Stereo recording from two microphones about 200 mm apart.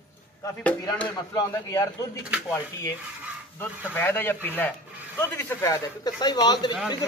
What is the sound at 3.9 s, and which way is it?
A man's voice, 10° left (ahead or behind).